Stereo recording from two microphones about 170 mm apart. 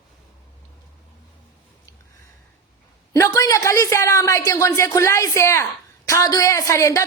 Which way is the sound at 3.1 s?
20° left (ahead or behind).